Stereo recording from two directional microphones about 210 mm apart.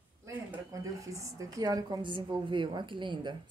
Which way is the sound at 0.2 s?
10° right (ahead or behind).